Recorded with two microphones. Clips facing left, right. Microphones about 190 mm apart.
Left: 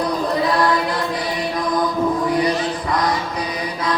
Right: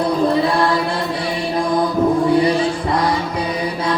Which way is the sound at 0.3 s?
30° right (ahead or behind).